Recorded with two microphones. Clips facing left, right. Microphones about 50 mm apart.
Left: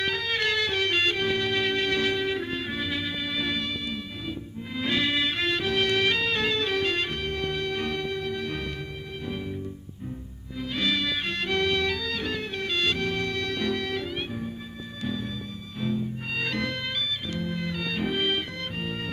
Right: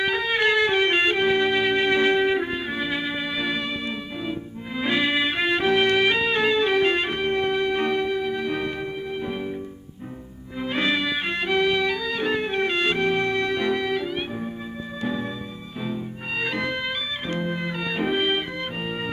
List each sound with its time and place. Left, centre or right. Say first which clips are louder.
0.0 s music: right 5 dB; centre
4.7 s music: right 4 dB; centre
10.6 s music: right 4 dB; right; by 14.4 s centre
15.0 s music: right 4 dB; right
15.8 s music: left 1 dB; centre
17.2 s music: right 4 dB; right; by 19.1 s centre